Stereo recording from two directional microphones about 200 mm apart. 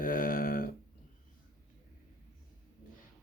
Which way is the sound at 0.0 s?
45° left (ahead or behind).